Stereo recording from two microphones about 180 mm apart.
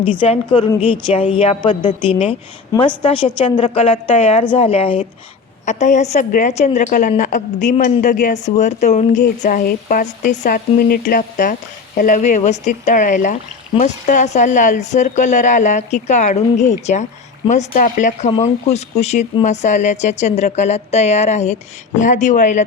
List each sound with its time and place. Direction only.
0.0 s a woman's voice: 30° left (ahead or behind); by 18.3 s 45° left (ahead or behind)
18.3 s speech: 35° left (ahead or behind)